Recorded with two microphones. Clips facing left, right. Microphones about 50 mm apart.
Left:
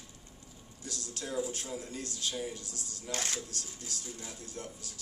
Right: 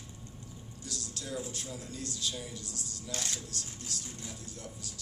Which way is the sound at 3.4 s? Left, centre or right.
Right.